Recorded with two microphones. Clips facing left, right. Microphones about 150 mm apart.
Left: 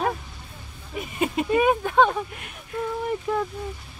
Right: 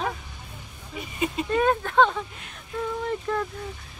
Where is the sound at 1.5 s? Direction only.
10° left (ahead or behind).